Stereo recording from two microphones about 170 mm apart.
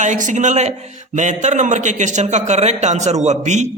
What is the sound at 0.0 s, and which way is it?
Speech, 45° right (ahead or behind).